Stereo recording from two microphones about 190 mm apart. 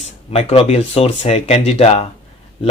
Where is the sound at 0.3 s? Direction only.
30° left (ahead or behind).